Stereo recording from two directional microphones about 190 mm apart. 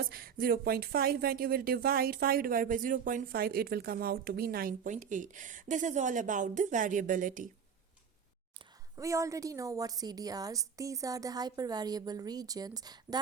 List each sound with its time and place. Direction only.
0.0 s speech: 50° right (ahead or behind)
9.0 s a woman's voice: 15° right (ahead or behind)